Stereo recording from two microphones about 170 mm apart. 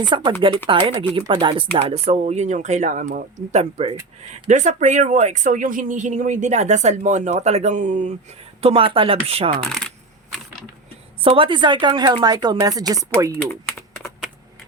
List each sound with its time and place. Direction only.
0.0 s speech: 30° right (ahead or behind); by 8.1 s 45° right (ahead or behind)
8.6 s speech: 35° right (ahead or behind)
9.6 s speech: 5° left (ahead or behind)
11.2 s speech: 30° right (ahead or behind)
13.5 s typing: 15° left (ahead or behind)